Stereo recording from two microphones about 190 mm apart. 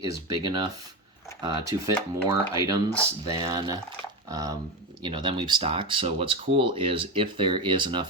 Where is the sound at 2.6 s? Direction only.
15° right (ahead or behind).